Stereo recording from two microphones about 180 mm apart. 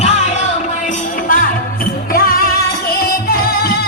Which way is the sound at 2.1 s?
55° left (ahead or behind).